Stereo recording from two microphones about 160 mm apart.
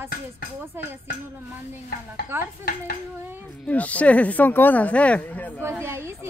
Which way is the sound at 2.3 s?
15° right (ahead or behind).